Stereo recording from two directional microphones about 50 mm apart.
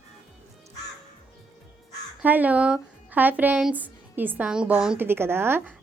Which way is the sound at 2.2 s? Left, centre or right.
Right.